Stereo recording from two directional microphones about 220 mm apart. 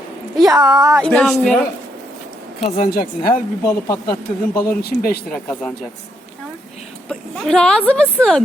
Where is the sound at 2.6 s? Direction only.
30° left (ahead or behind).